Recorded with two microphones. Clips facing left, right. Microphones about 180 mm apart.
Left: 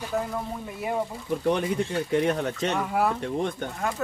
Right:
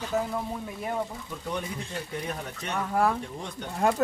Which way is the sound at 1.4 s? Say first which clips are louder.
Left 9 dB; 75° left (ahead or behind).